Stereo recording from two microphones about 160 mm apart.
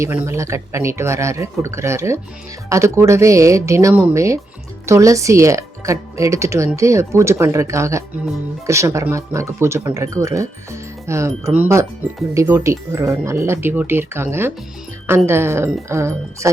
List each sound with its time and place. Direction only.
0.0 s speech: 15° right (ahead or behind)